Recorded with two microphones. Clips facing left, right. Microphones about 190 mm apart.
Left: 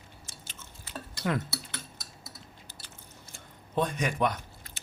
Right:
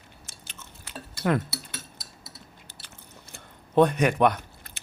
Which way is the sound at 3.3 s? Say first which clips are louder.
Right 8 dB; 65° right (ahead or behind).